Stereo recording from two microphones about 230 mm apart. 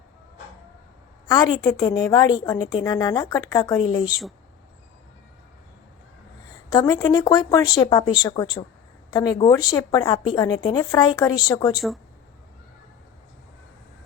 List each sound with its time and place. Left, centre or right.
1.3 s a woman's voice: centre
6.7 s a woman's voice: centre